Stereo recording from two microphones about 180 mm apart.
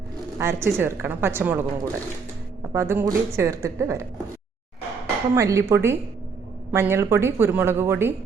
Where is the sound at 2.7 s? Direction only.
15° right (ahead or behind).